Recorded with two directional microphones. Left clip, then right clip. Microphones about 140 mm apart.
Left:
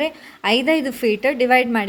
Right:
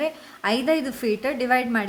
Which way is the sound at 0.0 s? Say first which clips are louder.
Left 4 dB; 20° left (ahead or behind).